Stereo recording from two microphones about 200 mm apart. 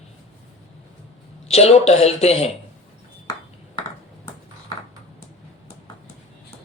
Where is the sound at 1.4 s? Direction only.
30° left (ahead or behind).